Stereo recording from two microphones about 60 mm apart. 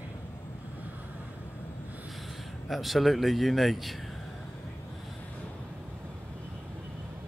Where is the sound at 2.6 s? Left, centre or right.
Centre.